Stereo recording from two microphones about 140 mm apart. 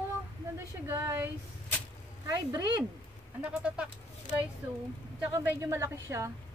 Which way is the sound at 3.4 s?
10° right (ahead or behind).